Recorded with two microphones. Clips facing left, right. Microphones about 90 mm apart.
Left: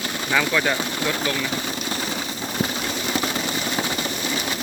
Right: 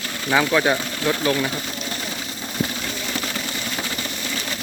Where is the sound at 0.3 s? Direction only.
15° right (ahead or behind).